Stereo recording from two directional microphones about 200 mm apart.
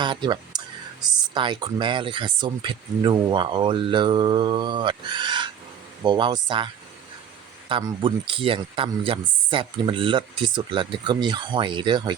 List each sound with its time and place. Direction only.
0.0 s speech: 20° right (ahead or behind)
7.7 s speech: 20° right (ahead or behind)